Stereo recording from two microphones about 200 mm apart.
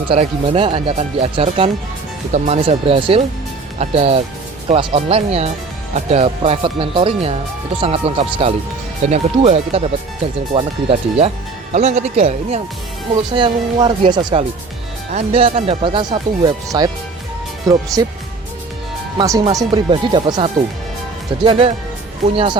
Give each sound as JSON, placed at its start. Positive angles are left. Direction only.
{"t": 0.1, "sound": "speech", "side_deg": -25}
{"t": 19.1, "sound": "speech", "side_deg": -15}